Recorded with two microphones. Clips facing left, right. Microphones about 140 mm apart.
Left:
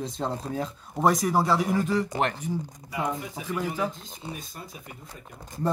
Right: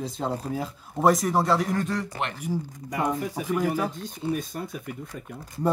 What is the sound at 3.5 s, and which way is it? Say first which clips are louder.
Speech: right 4 dB; 15° right (ahead or behind).